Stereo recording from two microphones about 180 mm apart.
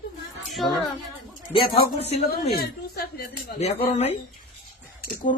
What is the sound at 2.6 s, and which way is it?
Speech, 60° left (ahead or behind).